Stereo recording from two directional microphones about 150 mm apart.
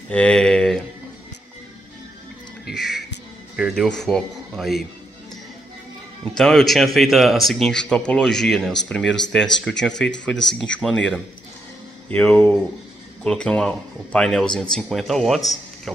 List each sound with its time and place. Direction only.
0.1 s speech: 5° left (ahead or behind)
2.7 s speech: centre (ahead or behind)
6.3 s speech: 5° left (ahead or behind)